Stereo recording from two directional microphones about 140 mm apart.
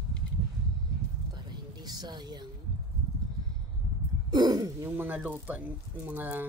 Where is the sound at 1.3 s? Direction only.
30° right (ahead or behind).